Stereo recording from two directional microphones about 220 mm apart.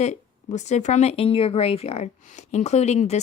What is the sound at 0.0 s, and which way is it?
A woman's voice, 30° left (ahead or behind).